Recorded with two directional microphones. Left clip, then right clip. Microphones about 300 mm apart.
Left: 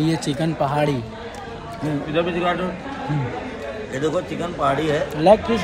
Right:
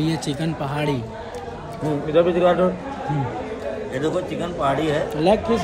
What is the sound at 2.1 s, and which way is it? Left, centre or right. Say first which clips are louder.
Speech: right 5 dB; right.